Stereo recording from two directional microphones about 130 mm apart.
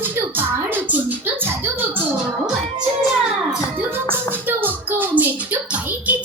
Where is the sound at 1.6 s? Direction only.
15° right (ahead or behind).